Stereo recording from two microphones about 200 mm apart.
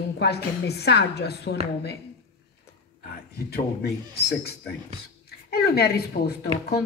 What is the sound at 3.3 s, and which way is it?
Speech, 50° left (ahead or behind).